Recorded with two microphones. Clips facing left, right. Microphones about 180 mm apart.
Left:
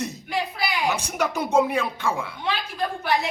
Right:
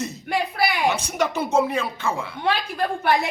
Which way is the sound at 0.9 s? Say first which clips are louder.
Right 2 dB; 10° left (ahead or behind).